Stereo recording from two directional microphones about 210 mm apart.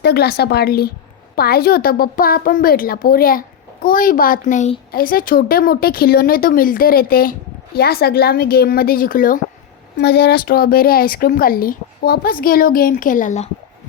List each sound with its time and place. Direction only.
0.0 s a woman's voice: 50° left (ahead or behind)